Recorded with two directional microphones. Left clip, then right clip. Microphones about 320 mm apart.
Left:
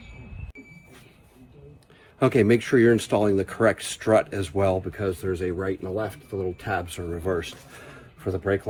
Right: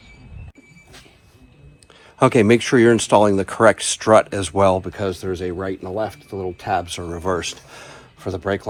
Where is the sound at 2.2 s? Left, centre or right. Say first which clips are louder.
Right 6 dB; centre.